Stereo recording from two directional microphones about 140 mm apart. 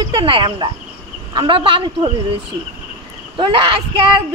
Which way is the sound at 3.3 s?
35° right (ahead or behind).